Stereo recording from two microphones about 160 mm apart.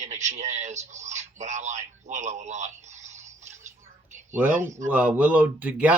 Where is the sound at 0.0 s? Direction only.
45° right (ahead or behind).